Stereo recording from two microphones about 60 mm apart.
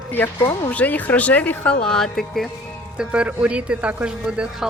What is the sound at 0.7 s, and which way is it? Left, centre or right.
Speech, left.